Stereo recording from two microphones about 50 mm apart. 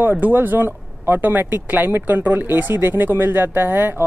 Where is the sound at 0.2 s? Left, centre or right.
Right.